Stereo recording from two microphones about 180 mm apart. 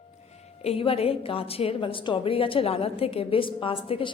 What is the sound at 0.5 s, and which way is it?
A woman's voice, 35° left (ahead or behind).